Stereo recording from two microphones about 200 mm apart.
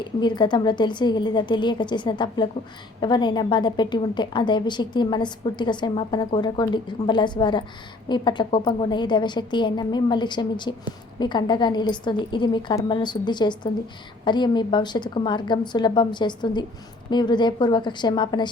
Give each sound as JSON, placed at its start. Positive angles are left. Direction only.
{"t": 0.0, "sound": "a woman's voice", "side_deg": 20}